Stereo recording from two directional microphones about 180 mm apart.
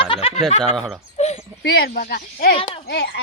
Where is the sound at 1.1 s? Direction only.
35° left (ahead or behind).